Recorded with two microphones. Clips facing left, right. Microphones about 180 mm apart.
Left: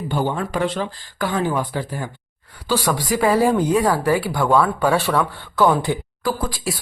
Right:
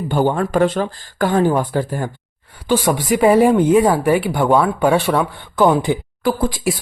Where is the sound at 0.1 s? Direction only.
50° right (ahead or behind).